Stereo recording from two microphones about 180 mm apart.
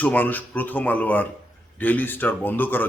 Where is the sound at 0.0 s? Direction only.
10° left (ahead or behind).